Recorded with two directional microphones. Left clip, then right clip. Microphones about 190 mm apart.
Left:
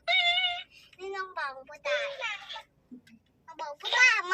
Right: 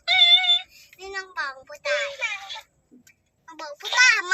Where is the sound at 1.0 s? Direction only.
15° left (ahead or behind).